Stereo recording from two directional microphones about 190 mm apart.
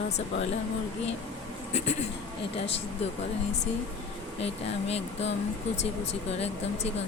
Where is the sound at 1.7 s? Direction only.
35° left (ahead or behind).